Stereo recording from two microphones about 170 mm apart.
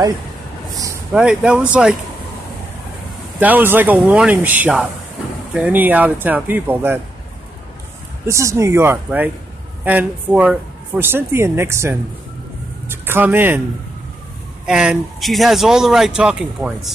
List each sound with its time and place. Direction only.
1.1 s speech: 5° right (ahead or behind)
3.3 s speech: 10° right (ahead or behind)
8.3 s speech: 15° right (ahead or behind)
14.7 s speech: 5° right (ahead or behind)